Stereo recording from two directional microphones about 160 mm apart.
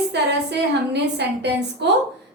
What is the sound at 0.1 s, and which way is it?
A woman's voice, 90° right.